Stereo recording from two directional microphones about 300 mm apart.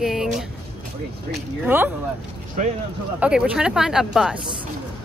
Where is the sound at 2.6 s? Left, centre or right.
Right.